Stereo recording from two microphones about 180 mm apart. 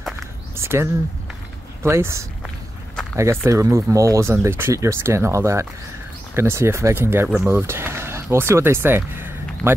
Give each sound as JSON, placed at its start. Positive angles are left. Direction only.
{"t": 0.6, "sound": "speech", "side_deg": -15}
{"t": 3.4, "sound": "speech", "side_deg": -15}